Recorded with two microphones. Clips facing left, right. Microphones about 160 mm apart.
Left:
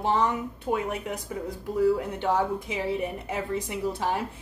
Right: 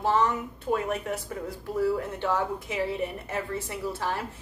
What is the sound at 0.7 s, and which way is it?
Speech, 15° left (ahead or behind).